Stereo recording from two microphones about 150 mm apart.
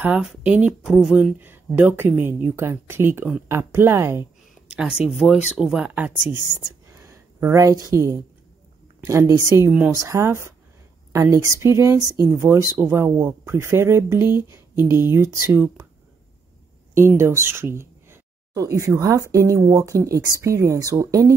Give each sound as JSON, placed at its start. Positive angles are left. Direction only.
{"t": 0.0, "sound": "speech", "side_deg": -5}
{"t": 3.2, "sound": "speech", "side_deg": -5}
{"t": 3.4, "sound": "speech", "side_deg": -15}
{"t": 4.6, "sound": "speech", "side_deg": -5}
{"t": 6.3, "sound": "a sound", "side_deg": -15}
{"t": 7.9, "sound": "speech", "side_deg": -25}
{"t": 17.2, "sound": "speech", "side_deg": -15}